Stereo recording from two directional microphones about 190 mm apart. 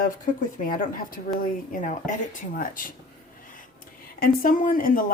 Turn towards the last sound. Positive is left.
turn(degrees=45)  # may be behind; listen again after turning